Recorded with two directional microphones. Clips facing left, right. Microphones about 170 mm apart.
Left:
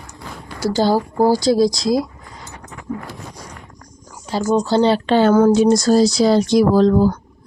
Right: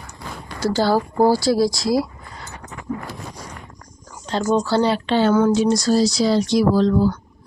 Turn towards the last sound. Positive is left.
turn(degrees=45)  # may be behind; listen again after turning